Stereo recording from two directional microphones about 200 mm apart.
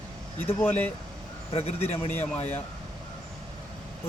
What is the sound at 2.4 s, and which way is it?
Speech, 35° left (ahead or behind).